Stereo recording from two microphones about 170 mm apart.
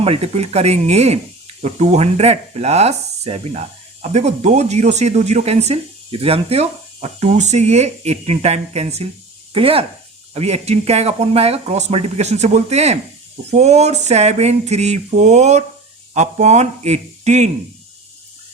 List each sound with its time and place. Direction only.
0.0 s speech: 35° right (ahead or behind)